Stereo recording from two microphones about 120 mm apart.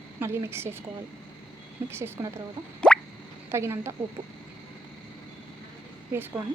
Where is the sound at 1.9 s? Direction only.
20° right (ahead or behind).